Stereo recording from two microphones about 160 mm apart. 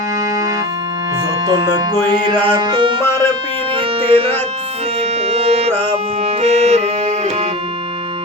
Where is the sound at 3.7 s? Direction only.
35° right (ahead or behind).